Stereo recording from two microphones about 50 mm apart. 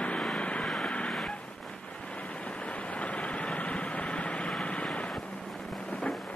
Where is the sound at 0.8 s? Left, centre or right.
Left.